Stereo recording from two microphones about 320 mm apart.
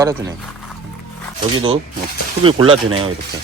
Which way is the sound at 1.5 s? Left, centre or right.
Centre.